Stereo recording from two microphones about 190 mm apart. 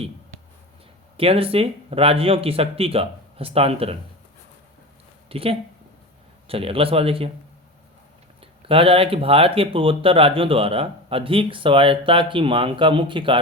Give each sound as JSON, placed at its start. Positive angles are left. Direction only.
{"t": 1.1, "sound": "speech", "side_deg": -30}
{"t": 5.3, "sound": "speech", "side_deg": -30}
{"t": 8.4, "sound": "speech", "side_deg": -30}